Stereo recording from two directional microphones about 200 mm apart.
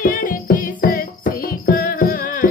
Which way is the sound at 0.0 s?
45° left (ahead or behind).